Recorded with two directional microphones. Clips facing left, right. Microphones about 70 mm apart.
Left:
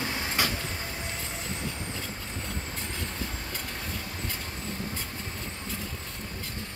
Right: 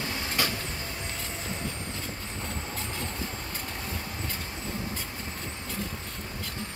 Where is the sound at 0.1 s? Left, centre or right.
Centre.